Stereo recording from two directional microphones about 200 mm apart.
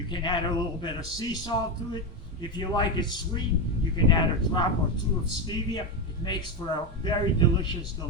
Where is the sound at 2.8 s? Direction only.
20° left (ahead or behind).